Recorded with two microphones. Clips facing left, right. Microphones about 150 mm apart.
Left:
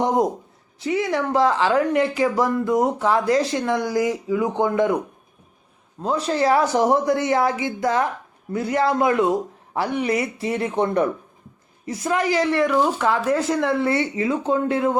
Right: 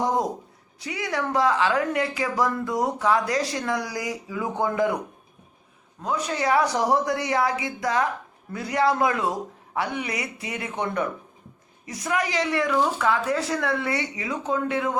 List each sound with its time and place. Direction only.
0.0 s speech: 20° left (ahead or behind)
6.0 s speech: 30° left (ahead or behind)